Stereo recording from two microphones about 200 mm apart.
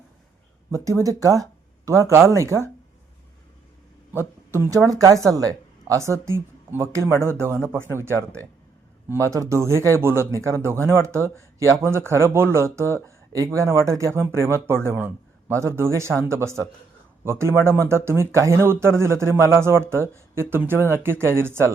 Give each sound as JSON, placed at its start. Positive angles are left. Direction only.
{"t": 0.7, "sound": "speech", "side_deg": -15}
{"t": 4.1, "sound": "speech", "side_deg": -10}